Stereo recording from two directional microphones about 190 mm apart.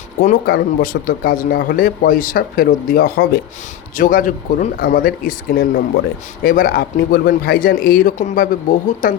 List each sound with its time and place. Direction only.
0.2 s speech: 50° left (ahead or behind)